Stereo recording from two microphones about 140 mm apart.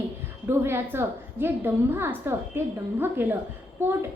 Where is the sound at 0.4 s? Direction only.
15° right (ahead or behind).